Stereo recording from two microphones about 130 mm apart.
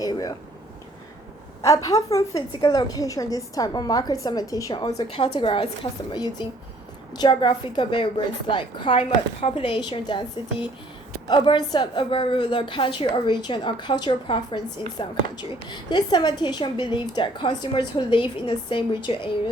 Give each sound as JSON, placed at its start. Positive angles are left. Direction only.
{"t": 0.0, "sound": "a woman's voice", "side_deg": 30}
{"t": 1.6, "sound": "a woman's voice", "side_deg": 25}
{"t": 5.1, "sound": "a woman's voice", "side_deg": 40}